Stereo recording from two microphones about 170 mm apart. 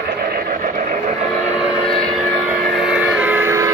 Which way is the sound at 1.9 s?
5° left (ahead or behind).